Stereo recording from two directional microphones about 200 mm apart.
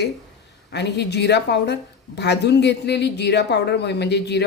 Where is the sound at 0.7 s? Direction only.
55° left (ahead or behind).